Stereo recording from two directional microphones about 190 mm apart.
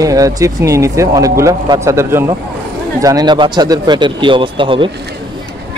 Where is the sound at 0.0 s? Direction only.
20° right (ahead or behind).